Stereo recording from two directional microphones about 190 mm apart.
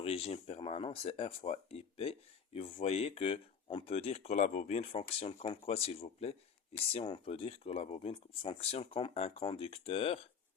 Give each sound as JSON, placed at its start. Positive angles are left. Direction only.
{"t": 0.0, "sound": "speech", "side_deg": 30}